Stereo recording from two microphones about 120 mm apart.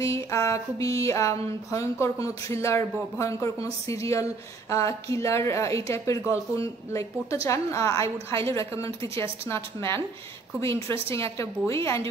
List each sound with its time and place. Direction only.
0.0 s speech: 25° left (ahead or behind)